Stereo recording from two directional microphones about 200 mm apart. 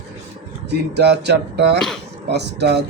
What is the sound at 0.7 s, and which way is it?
Speech, 55° right (ahead or behind).